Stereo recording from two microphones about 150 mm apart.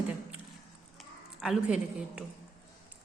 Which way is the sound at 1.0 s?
Centre (ahead or behind).